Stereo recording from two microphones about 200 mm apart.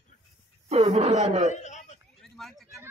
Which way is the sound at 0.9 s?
35° right (ahead or behind).